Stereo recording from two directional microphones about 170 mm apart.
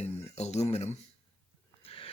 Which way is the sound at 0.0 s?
40° left (ahead or behind).